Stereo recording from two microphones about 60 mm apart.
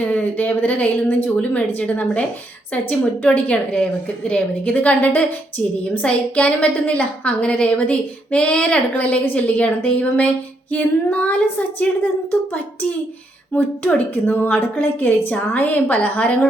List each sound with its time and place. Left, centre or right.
0.0 s a woman's voice: left